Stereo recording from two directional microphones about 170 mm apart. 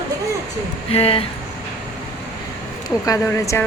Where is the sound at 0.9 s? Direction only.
35° left (ahead or behind).